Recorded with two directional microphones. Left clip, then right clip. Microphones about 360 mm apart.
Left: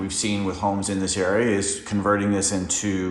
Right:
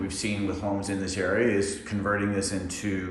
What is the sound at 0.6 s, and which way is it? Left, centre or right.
Speech, centre.